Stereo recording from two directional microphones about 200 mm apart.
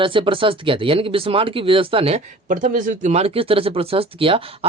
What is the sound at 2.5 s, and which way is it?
Speech, 40° right (ahead or behind).